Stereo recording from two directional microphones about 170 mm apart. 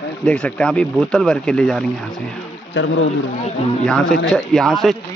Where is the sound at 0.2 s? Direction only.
5° left (ahead or behind).